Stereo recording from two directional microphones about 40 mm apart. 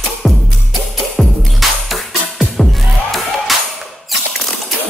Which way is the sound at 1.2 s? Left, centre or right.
Centre.